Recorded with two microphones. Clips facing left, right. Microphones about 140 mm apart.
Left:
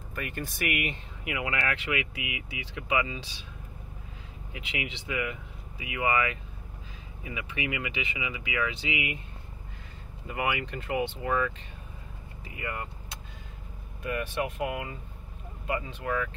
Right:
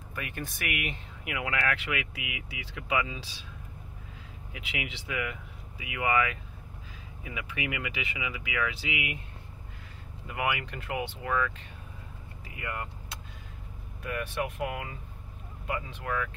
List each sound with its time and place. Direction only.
0.2 s speech: centre (ahead or behind)
4.5 s speech: centre (ahead or behind)
10.2 s speech: centre (ahead or behind)
11.2 s speech: 10° left (ahead or behind)
12.5 s speech: centre (ahead or behind)
14.4 s speech: 5° left (ahead or behind)